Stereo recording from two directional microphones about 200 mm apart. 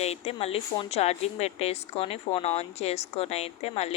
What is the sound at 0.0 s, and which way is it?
A woman's voice, 30° left (ahead or behind).